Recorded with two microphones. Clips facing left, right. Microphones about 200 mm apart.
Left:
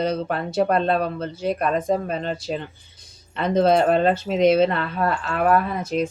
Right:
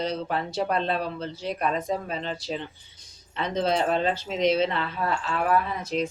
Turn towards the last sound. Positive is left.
turn(degrees=50)  # may be behind; listen again after turning